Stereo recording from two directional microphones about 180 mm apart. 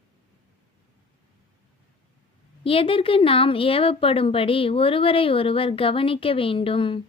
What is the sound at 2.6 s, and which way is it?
Speech, 30° left (ahead or behind).